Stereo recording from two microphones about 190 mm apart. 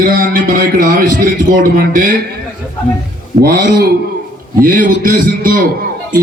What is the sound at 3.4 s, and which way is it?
Speech, 55° right (ahead or behind).